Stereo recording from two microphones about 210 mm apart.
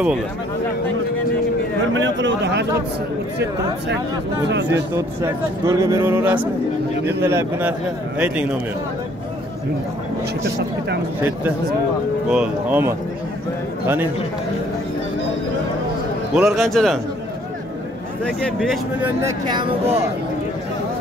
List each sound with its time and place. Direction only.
2.0 s speech: 60° right (ahead or behind)
4.9 s speech: 15° right (ahead or behind)
11.1 s speech: 10° right (ahead or behind)
16.3 s speech: centre (ahead or behind)
18.2 s speech: 5° left (ahead or behind)
19.0 s speech: 15° right (ahead or behind)